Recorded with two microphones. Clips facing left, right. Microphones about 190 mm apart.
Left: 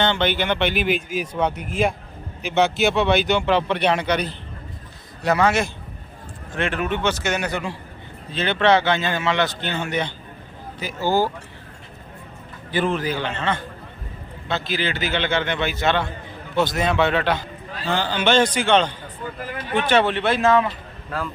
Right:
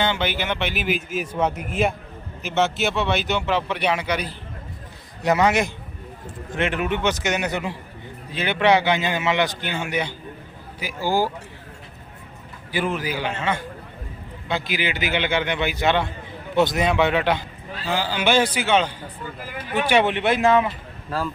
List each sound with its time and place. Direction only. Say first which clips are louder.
0.0 s a man's voice: left 3 dB; 10° right (ahead or behind)
5.2 s a man's voice: even; 15° right (ahead or behind)
12.7 s a man's voice: left 3 dB; 10° right (ahead or behind)